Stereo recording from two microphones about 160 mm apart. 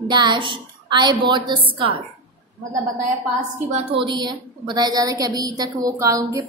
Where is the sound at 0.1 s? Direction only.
25° right (ahead or behind).